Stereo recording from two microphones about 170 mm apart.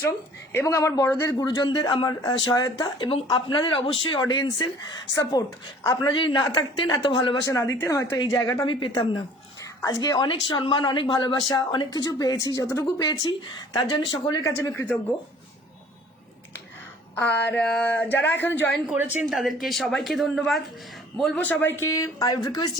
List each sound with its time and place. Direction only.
0.5 s a man's voice: 15° left (ahead or behind)
17.2 s a man's voice: 10° left (ahead or behind)
18.9 s a woman's voice: 10° right (ahead or behind); by 22.7 s 20° left (ahead or behind)